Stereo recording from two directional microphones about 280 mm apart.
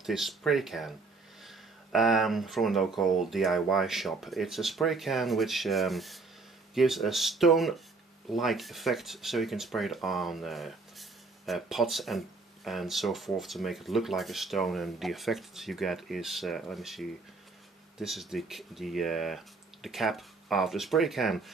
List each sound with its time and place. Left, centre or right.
0.0 s speech: centre